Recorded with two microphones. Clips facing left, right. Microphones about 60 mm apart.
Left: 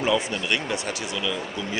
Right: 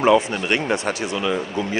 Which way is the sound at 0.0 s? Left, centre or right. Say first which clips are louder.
Right 7 dB; right.